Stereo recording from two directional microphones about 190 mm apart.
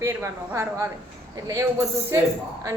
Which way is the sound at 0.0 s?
15° right (ahead or behind).